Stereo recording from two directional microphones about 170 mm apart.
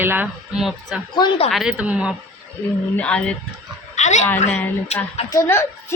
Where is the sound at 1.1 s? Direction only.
30° left (ahead or behind).